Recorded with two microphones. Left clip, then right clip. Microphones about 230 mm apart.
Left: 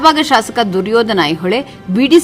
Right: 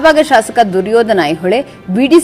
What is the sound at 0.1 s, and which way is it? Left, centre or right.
A woman's voice, centre.